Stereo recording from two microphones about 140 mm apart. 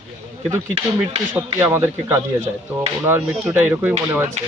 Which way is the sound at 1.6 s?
15° right (ahead or behind).